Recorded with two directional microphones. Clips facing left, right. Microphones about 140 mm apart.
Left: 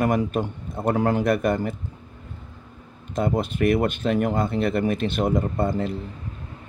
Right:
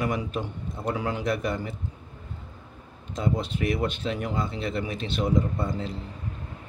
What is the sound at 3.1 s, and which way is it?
Speech, 55° left (ahead or behind).